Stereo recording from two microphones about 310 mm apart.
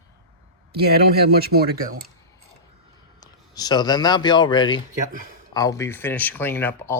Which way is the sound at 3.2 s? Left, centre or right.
Centre.